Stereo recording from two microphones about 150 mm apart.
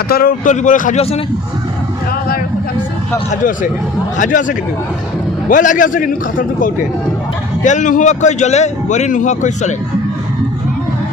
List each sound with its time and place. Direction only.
0.1 s a man's voice: 70° left (ahead or behind)
4.2 s a man's voice: 60° left (ahead or behind)